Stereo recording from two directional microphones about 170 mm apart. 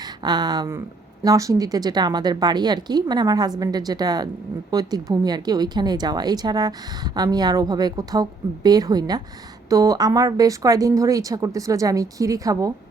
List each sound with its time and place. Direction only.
0.2 s a woman's voice: 25° right (ahead or behind)